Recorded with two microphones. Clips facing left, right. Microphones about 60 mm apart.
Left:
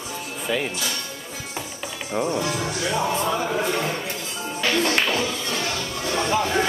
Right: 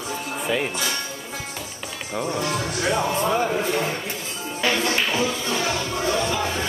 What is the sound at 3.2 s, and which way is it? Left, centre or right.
Speech, right.